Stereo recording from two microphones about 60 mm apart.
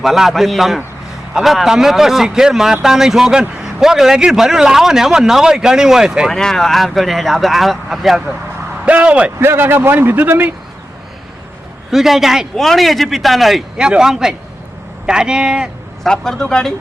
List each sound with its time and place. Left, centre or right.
0.0 s a man's voice: centre
6.3 s speech: centre
8.8 s speech: right
9.4 s a man's voice: right
11.9 s a man's voice: centre
16.0 s speech: centre